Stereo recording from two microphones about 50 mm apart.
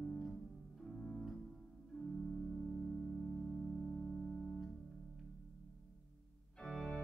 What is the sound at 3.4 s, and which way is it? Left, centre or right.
Music, centre.